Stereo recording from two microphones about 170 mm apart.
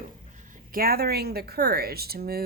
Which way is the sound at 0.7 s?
60° right (ahead or behind).